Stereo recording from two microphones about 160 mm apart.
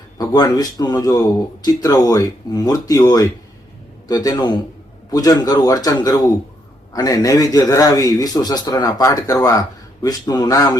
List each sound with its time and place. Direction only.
0.2 s a man's voice: 25° left (ahead or behind)